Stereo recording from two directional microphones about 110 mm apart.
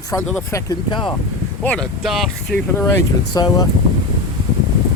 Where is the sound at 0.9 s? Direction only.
45° left (ahead or behind).